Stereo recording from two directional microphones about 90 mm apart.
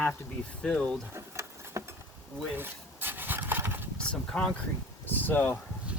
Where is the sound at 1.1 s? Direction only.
35° right (ahead or behind).